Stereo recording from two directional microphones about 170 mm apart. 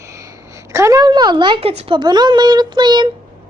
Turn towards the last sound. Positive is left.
turn(degrees=-25)  # may be behind; listen again after turning